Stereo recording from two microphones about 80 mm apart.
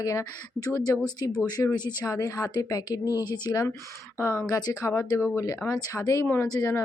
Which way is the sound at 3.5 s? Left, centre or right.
Left.